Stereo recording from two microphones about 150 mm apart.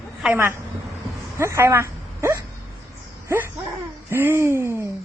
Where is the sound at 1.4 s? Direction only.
20° right (ahead or behind).